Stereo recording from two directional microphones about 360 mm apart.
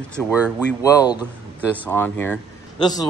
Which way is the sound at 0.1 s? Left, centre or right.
Centre.